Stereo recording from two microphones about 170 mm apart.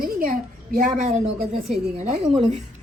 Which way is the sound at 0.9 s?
45° right (ahead or behind).